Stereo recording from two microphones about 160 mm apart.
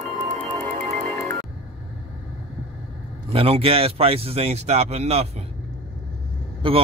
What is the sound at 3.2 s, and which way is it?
A man's voice, 40° right (ahead or behind).